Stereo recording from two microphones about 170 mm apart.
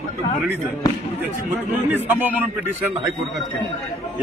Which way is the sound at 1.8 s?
10° right (ahead or behind).